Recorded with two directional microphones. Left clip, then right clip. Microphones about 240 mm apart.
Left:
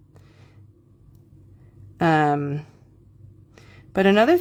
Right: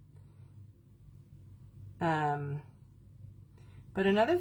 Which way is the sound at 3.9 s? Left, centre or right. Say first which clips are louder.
Left 11 dB; left.